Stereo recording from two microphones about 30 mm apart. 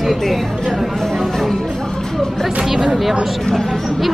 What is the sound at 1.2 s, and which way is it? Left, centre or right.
Music, centre.